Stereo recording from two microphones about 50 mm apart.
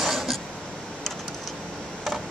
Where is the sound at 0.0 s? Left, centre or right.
Centre.